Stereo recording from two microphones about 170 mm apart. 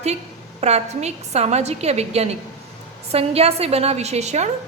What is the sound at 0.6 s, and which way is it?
A woman's voice, 40° right (ahead or behind).